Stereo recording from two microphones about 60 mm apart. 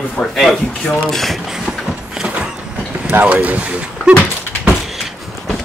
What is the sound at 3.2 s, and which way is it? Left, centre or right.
Speech, right.